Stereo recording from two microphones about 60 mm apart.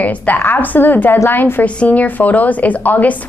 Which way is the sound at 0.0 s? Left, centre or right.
Left.